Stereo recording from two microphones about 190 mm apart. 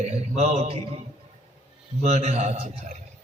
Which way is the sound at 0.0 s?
35° right (ahead or behind).